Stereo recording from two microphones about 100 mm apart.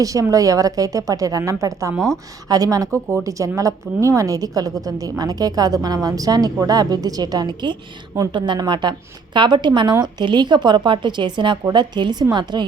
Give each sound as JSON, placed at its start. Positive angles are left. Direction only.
{"t": 0.0, "sound": "a woman's voice", "side_deg": -35}